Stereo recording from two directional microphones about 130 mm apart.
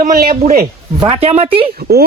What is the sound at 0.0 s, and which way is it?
Speech, 90° right.